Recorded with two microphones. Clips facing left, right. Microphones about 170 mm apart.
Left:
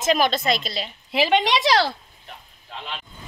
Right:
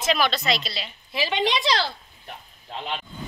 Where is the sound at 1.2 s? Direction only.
75° left (ahead or behind).